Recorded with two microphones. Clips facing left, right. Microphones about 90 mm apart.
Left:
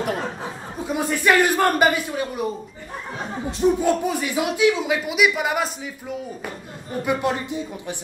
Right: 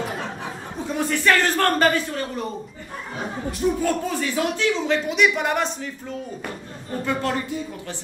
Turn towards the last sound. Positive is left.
turn(degrees=15)  # may be behind; listen again after turning